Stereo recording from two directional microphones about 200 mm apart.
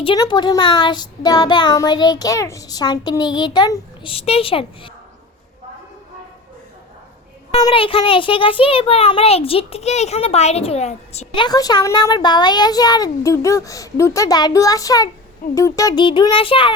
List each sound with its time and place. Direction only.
0.0 s speech: 25° left (ahead or behind)
7.6 s speech: 25° left (ahead or behind)
11.4 s speech: 20° left (ahead or behind)